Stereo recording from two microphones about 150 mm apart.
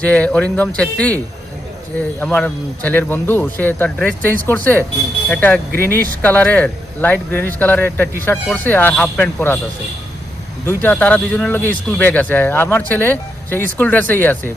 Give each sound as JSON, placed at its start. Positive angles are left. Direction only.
{"t": 0.0, "sound": "speech", "side_deg": 10}
{"t": 10.7, "sound": "speech", "side_deg": 10}